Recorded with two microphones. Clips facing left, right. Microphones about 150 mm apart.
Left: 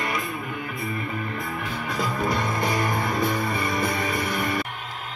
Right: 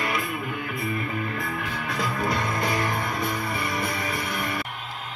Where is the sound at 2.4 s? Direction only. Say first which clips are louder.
Left 1 dB; 25° left (ahead or behind).